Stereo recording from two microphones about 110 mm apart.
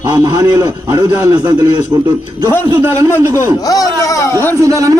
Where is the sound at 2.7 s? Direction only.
20° right (ahead or behind).